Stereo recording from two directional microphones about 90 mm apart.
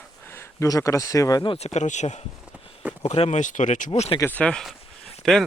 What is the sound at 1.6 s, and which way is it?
Speech, 90° left.